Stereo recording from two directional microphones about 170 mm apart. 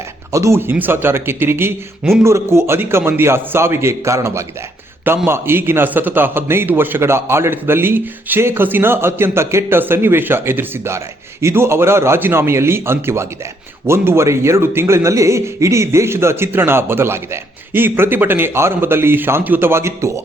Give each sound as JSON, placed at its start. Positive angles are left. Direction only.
{"t": 0.3, "sound": "a man's voice", "side_deg": -15}